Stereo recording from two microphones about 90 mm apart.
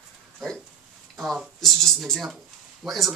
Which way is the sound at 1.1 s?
Centre (ahead or behind).